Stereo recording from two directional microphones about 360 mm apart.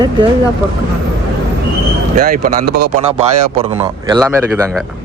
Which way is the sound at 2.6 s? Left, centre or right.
Right.